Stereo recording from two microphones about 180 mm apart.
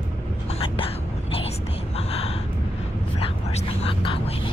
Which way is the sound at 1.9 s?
35° left (ahead or behind).